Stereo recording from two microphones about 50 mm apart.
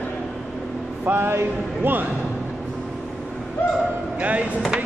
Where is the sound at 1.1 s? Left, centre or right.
Right.